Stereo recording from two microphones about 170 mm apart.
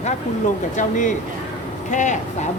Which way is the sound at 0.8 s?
45° left (ahead or behind).